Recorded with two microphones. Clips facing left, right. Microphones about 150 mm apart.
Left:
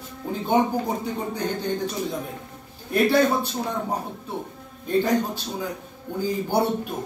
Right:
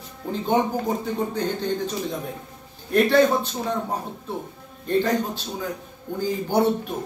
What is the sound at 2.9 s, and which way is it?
Speech, 10° left (ahead or behind).